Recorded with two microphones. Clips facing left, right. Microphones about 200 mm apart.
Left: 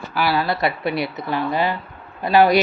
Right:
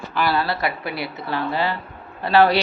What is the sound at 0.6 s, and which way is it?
Speech, 20° left (ahead or behind).